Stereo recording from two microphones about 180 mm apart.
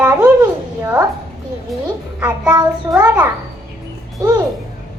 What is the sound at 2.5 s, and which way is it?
Child singing, 20° right (ahead or behind).